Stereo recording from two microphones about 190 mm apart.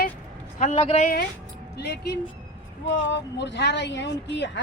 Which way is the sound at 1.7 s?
60° left (ahead or behind).